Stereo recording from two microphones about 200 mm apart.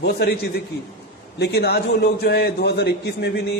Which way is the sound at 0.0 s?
55° left (ahead or behind).